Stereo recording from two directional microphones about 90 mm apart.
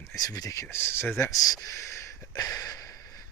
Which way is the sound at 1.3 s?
40° left (ahead or behind).